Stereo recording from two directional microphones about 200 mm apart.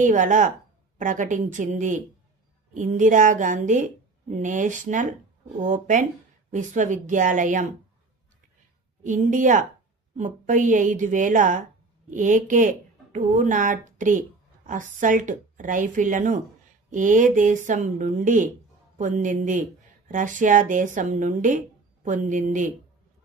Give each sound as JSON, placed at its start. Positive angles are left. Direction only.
{"t": 0.0, "sound": "a woman's voice", "side_deg": -40}
{"t": 9.0, "sound": "a woman's voice", "side_deg": -40}